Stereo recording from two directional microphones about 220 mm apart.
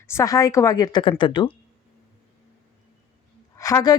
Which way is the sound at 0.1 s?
15° left (ahead or behind).